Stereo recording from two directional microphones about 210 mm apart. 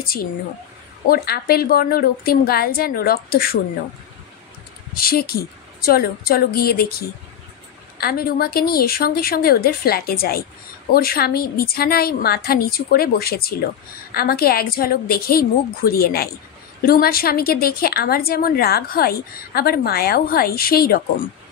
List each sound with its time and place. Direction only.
1.0 s a woman's voice: 45° left (ahead or behind)
4.9 s a woman's voice: 45° left (ahead or behind)